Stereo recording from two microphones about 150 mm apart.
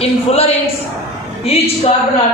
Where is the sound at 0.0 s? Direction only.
45° left (ahead or behind).